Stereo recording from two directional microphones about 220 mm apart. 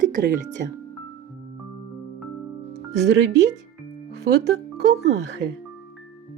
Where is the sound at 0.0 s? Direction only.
35° right (ahead or behind).